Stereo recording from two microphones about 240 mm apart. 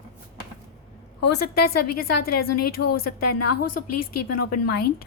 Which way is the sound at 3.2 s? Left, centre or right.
Left.